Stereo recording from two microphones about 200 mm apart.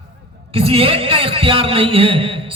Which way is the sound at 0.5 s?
30° right (ahead or behind).